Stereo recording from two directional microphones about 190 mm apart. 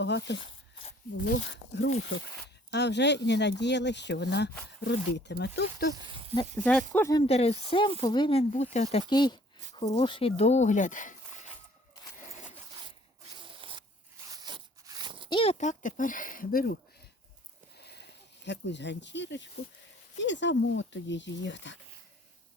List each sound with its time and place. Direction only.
0.0 s speech: 65° left (ahead or behind)
6.6 s speech: 5° left (ahead or behind)
7.2 s speech: 35° left (ahead or behind)
13.4 s zipper: 25° right (ahead or behind)
15.3 s speech: 30° left (ahead or behind); by 16.7 s 50° left (ahead or behind)
18.4 s speech: 65° left (ahead or behind)